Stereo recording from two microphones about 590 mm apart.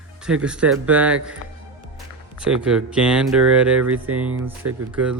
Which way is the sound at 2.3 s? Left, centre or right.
Centre.